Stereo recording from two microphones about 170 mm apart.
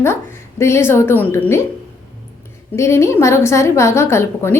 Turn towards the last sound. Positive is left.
turn(degrees=15)  # may be behind; listen again after turning